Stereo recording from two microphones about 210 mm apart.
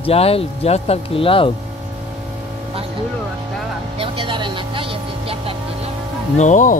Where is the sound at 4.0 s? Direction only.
25° right (ahead or behind).